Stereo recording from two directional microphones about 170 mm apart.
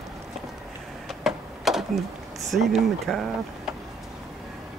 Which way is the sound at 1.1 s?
Centre (ahead or behind).